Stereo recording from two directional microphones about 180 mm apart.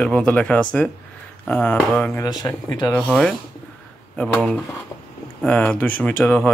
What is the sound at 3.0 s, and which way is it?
Speech, centre (ahead or behind).